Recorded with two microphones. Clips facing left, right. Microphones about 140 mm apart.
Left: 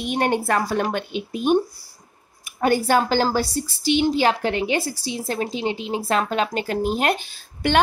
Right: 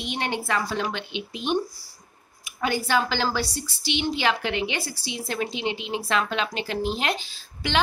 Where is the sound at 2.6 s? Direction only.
45° left (ahead or behind).